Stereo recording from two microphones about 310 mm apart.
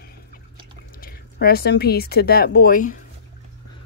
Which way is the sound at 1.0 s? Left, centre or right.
Left.